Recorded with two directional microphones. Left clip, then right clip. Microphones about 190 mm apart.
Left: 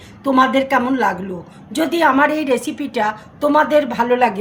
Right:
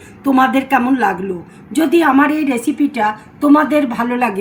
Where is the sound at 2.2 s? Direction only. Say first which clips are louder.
Right 1 dB; 60° left (ahead or behind).